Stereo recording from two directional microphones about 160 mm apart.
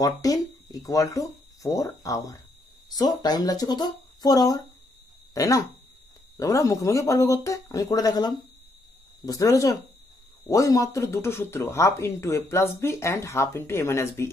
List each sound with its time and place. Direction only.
0.0 s speech: 20° left (ahead or behind)